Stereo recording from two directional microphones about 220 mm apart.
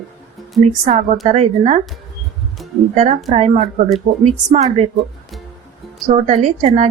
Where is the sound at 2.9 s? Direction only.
30° right (ahead or behind).